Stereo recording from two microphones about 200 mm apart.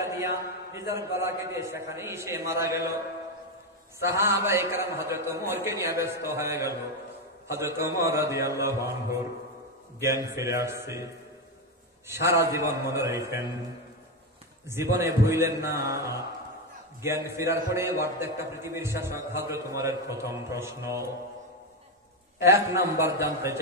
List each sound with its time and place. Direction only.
0.2 s a man's voice: 15° right (ahead or behind)
4.0 s a man's voice: 15° right (ahead or behind)
10.3 s a man's voice: 15° right (ahead or behind)
12.1 s a man's voice: 15° right (ahead or behind)
14.7 s a man's voice: 10° right (ahead or behind)
22.4 s a man's voice: 15° right (ahead or behind)